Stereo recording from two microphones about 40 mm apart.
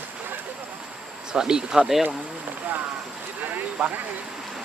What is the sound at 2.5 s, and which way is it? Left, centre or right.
Speech, right.